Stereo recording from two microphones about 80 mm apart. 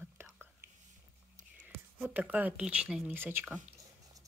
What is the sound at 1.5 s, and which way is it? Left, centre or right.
Speech, right.